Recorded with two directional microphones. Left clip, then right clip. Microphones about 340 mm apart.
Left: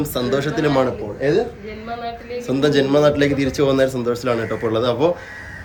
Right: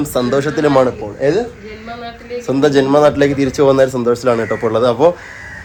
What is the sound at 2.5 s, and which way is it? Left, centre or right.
A man's voice, centre.